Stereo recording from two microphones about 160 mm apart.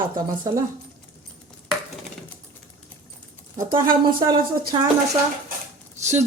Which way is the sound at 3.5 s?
30° right (ahead or behind).